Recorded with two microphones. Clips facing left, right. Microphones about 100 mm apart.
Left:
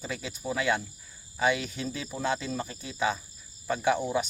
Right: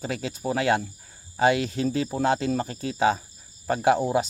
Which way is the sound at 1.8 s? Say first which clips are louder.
Right 10 dB; 55° right (ahead or behind).